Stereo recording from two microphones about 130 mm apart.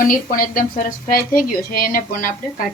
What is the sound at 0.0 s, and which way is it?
A woman's voice, 90° left.